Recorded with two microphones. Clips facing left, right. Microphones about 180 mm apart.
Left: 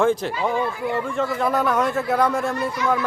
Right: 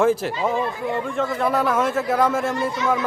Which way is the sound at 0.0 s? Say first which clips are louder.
Right 1 dB; 5° right (ahead or behind).